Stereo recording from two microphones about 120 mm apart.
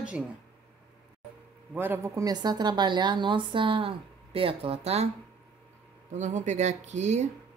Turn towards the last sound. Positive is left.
turn(degrees=-75)  # may be behind; listen again after turning